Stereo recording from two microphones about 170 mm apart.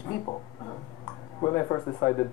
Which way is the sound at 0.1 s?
30° left (ahead or behind).